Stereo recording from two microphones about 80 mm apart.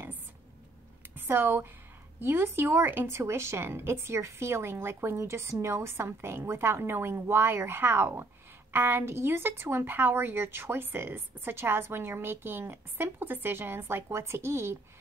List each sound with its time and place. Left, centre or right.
1.1 s a woman's voice: right